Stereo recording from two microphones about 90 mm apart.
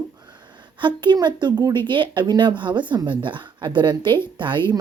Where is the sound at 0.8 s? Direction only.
60° right (ahead or behind).